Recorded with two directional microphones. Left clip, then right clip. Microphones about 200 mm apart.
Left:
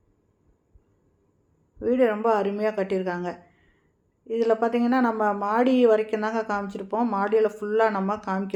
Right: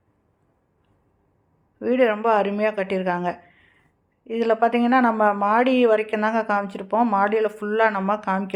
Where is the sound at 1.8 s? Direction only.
30° right (ahead or behind).